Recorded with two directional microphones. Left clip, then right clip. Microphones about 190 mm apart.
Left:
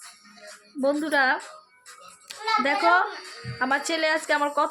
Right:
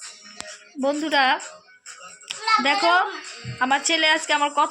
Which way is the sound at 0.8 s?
20° left (ahead or behind).